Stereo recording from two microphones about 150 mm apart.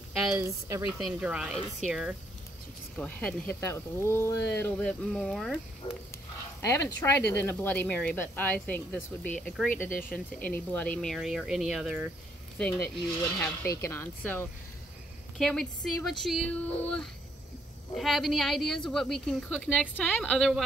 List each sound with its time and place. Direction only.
0.1 s speech: centre (ahead or behind)
0.4 s speech: 20° right (ahead or behind)
0.8 s a woman's voice: 5° right (ahead or behind)
3.6 s speech: 15° left (ahead or behind); by 5.6 s centre (ahead or behind)
5.8 s a sound: 35° left (ahead or behind)
6.6 s a woman's voice: 15° left (ahead or behind)
9.8 s speech: 70° left (ahead or behind)
10.1 s a woman's voice: 10° left (ahead or behind)
12.5 s a woman's voice: 5° left (ahead or behind)